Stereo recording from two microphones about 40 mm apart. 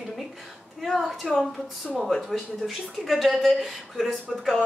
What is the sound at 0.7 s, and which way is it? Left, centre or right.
A woman's voice, centre.